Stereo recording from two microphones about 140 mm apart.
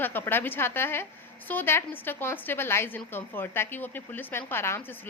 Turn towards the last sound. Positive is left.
turn(degrees=15)  # may be behind; listen again after turning